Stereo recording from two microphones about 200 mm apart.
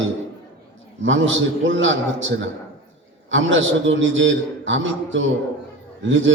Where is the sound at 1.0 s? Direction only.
75° right (ahead or behind).